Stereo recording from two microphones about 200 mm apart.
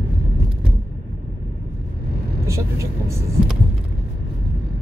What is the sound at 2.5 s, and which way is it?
Speech, 15° right (ahead or behind).